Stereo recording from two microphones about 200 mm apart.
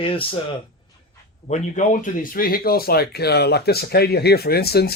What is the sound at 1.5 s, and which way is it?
Speech, 40° left (ahead or behind).